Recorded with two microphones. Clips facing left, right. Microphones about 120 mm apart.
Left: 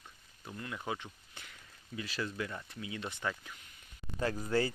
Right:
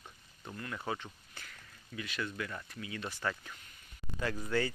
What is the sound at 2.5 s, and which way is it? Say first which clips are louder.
Speech: even; 20° left (ahead or behind).